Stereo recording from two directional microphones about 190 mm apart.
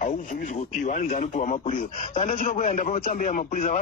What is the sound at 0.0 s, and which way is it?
A man's voice, 40° left (ahead or behind).